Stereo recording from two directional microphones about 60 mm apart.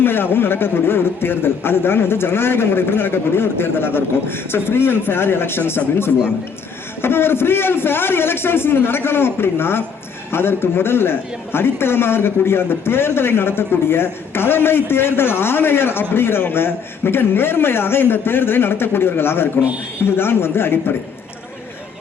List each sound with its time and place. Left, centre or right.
0.0 s speech: left